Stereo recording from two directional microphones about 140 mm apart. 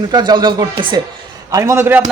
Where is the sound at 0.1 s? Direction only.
30° right (ahead or behind).